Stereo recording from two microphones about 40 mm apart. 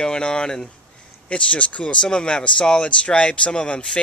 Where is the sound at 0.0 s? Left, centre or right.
Left.